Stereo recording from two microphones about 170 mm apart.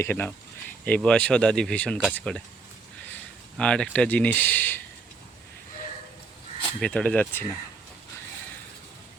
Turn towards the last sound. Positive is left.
turn(degrees=10)  # may be behind; listen again after turning